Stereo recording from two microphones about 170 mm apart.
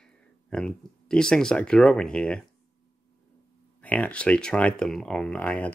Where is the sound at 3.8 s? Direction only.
10° left (ahead or behind).